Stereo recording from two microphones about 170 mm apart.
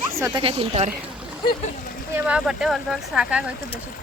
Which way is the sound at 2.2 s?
5° right (ahead or behind).